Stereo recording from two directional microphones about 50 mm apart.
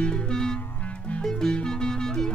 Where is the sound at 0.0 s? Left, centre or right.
Centre.